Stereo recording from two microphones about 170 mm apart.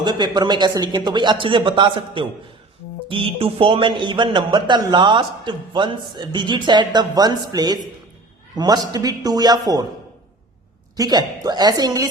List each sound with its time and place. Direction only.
0.0 s a man's voice: 25° right (ahead or behind)
10.9 s a man's voice: 20° right (ahead or behind)